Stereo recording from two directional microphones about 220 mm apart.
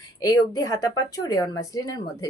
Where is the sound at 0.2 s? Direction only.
15° left (ahead or behind).